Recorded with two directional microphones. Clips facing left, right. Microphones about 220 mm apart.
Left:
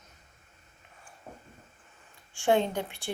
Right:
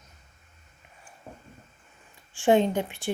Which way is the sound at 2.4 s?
15° right (ahead or behind).